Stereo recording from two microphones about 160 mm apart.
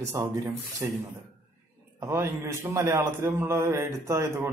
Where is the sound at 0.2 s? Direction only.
20° right (ahead or behind).